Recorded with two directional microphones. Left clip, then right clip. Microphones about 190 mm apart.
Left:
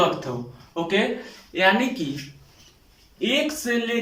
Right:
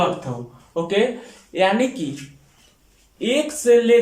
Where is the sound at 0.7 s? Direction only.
25° right (ahead or behind).